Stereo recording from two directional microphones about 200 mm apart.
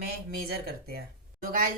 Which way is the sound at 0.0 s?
50° right (ahead or behind).